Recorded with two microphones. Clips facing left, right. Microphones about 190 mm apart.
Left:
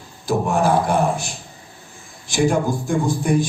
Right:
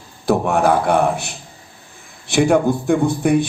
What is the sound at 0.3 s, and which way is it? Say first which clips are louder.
A man's voice: right 3 dB; 60° right (ahead or behind).